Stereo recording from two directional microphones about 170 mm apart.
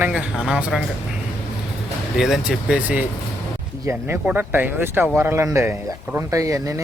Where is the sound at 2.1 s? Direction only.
Centre (ahead or behind).